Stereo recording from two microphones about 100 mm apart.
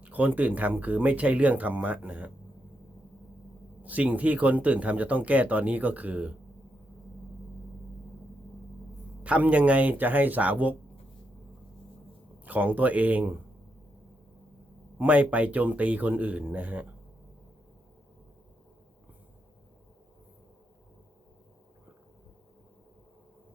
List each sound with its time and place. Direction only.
0.0 s speech: 15° right (ahead or behind)
3.8 s speech: 15° right (ahead or behind)
9.2 s speech: 15° right (ahead or behind)
12.5 s speech: 15° right (ahead or behind)
14.9 s speech: 15° right (ahead or behind)